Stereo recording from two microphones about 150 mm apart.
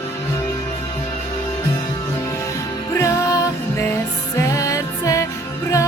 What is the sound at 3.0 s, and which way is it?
Music, 20° left (ahead or behind).